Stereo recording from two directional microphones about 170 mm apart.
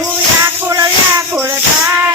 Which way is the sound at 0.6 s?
20° right (ahead or behind).